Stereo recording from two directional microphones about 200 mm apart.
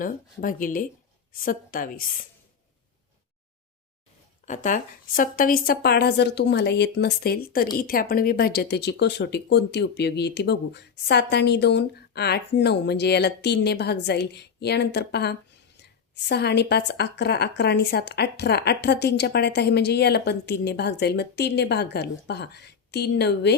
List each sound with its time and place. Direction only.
0.0 s a woman's voice: 45° left (ahead or behind)
4.4 s a woman's voice: 40° left (ahead or behind); by 23.6 s 55° left (ahead or behind)